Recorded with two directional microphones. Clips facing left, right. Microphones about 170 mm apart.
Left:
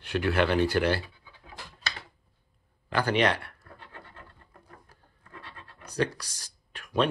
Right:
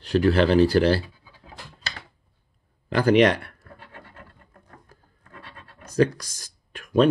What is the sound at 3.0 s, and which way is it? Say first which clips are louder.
Speech: right 8 dB; 40° right (ahead or behind).